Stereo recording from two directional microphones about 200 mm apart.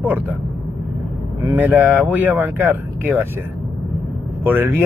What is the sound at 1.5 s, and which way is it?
Speech, 10° right (ahead or behind).